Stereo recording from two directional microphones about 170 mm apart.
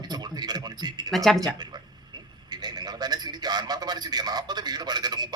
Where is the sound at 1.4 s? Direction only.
25° right (ahead or behind).